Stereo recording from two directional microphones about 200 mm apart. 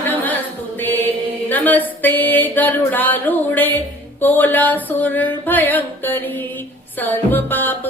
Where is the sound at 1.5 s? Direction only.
10° left (ahead or behind).